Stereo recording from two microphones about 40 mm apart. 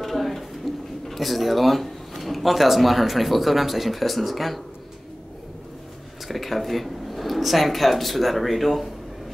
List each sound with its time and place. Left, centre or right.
0.0 s a sound: centre
1.0 s speech: centre
6.2 s speech: centre